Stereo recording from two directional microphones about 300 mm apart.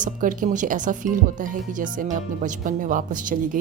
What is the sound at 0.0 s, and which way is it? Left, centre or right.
Speech, right.